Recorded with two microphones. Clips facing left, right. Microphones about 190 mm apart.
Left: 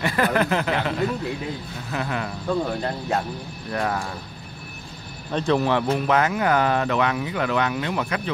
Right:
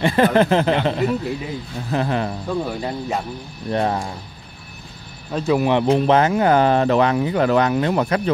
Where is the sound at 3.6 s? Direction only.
30° right (ahead or behind).